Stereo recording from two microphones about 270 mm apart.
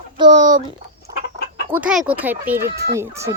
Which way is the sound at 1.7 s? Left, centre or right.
Centre.